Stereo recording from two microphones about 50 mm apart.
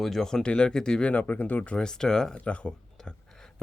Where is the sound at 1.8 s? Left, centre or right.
Centre.